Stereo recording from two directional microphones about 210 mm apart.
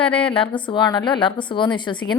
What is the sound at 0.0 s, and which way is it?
A woman's voice, 25° left (ahead or behind).